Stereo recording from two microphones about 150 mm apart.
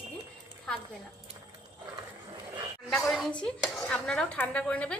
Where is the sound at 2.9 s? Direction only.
Centre (ahead or behind).